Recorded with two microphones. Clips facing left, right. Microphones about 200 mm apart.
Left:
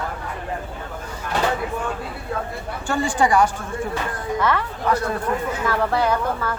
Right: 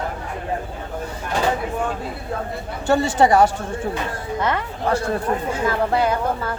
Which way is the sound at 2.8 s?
25° right (ahead or behind).